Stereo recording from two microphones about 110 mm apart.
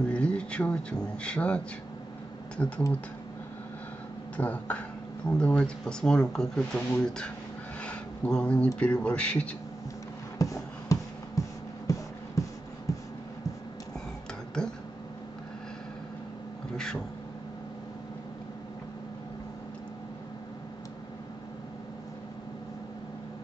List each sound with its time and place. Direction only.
0.1 s speech: 10° left (ahead or behind)
2.6 s speech: 15° left (ahead or behind)
4.4 s speech: 15° left (ahead or behind)
7.8 s speech: 10° left (ahead or behind)
10.4 s music: 30° left (ahead or behind)
12.4 s beatboxing: 30° left (ahead or behind)
12.9 s a sound: 30° left (ahead or behind)
14.6 s a sound: 5° left (ahead or behind)
16.7 s a sound: 5° left (ahead or behind)